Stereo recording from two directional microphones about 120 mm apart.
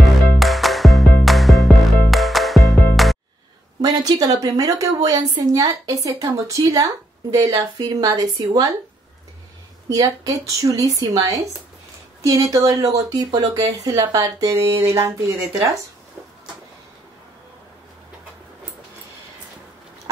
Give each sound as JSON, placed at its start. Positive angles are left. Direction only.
{"t": 0.0, "sound": "music", "side_deg": 0}
{"t": 3.8, "sound": "a woman's voice", "side_deg": -35}
{"t": 9.8, "sound": "speech", "side_deg": -30}